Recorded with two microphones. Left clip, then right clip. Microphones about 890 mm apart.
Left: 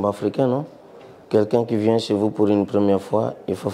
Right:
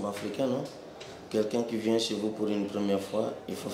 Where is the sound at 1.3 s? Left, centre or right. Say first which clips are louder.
Left 11 dB; left.